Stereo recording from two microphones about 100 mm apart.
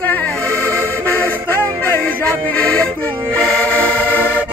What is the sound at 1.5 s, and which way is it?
Music, 20° left (ahead or behind).